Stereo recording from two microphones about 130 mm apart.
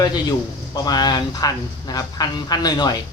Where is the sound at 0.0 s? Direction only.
30° left (ahead or behind).